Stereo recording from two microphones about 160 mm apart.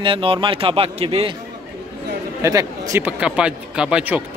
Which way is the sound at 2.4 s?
20° right (ahead or behind).